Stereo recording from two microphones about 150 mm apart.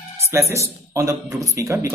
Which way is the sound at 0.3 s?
15° right (ahead or behind).